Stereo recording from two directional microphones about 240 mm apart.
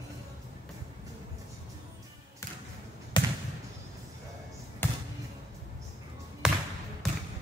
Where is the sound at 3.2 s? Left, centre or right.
Centre.